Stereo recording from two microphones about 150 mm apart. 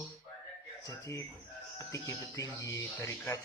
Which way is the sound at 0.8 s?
20° left (ahead or behind).